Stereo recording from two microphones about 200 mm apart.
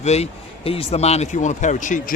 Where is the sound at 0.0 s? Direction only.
30° left (ahead or behind).